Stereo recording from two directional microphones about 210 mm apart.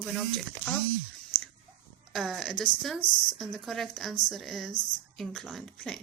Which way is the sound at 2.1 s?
Centre (ahead or behind).